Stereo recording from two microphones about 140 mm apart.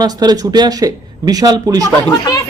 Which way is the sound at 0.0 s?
30° right (ahead or behind).